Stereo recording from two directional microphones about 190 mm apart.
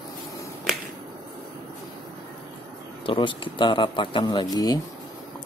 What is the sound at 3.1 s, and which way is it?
A man's voice, 25° left (ahead or behind).